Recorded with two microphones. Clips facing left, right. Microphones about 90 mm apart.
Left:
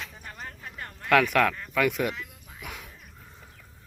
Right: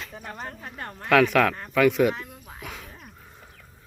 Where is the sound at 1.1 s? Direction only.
Centre (ahead or behind).